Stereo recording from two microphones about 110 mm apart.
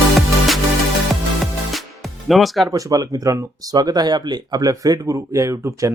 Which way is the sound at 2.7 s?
35° right (ahead or behind).